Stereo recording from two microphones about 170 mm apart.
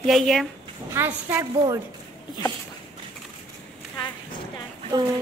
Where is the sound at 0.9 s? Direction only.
15° right (ahead or behind).